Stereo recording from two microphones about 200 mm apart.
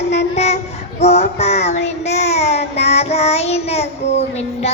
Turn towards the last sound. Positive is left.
turn(degrees=30)  # may be behind; listen again after turning